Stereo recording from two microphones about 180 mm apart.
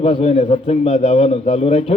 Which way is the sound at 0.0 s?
30° left (ahead or behind).